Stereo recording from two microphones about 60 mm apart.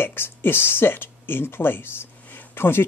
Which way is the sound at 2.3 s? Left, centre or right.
Left.